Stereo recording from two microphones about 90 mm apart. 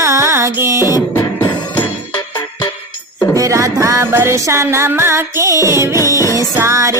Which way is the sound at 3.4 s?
35° right (ahead or behind).